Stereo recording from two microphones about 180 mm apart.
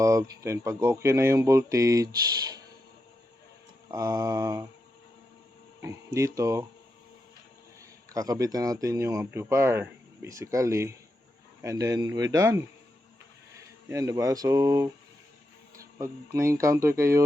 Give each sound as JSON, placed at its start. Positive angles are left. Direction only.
{"t": 0.0, "sound": "speech", "side_deg": -15}
{"t": 3.9, "sound": "speech", "side_deg": -20}
{"t": 5.8, "sound": "speech", "side_deg": -15}
{"t": 8.1, "sound": "speech", "side_deg": -20}